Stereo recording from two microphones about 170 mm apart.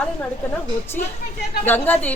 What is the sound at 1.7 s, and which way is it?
Speech, 10° left (ahead or behind).